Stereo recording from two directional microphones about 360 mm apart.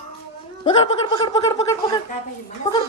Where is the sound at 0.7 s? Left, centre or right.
Centre.